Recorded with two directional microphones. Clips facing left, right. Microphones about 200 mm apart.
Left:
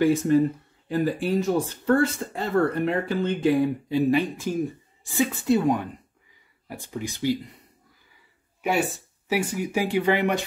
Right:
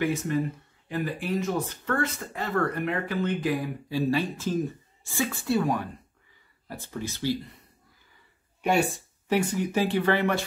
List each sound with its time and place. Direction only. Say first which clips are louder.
0.0 s speech: left 7 dB; 30° left (ahead or behind); by 7.3 s 15° left (ahead or behind)
9.3 s speech: even; 10° left (ahead or behind)